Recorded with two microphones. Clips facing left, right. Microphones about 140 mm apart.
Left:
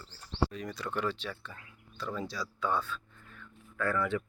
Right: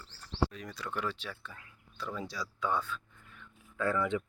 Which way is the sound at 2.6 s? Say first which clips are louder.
Left 1 dB; 15° right (ahead or behind).